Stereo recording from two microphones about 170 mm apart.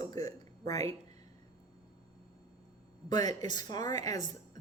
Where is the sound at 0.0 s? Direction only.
20° left (ahead or behind).